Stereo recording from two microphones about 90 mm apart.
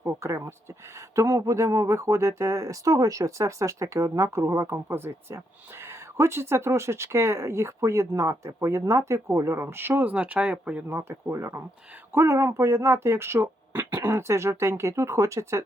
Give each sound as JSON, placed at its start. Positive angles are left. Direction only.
{"t": 0.0, "sound": "speech", "side_deg": -35}
{"t": 10.8, "sound": "speech", "side_deg": -30}